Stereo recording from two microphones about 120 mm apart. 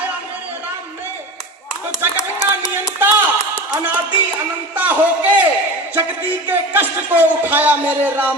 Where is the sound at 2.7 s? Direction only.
15° right (ahead or behind).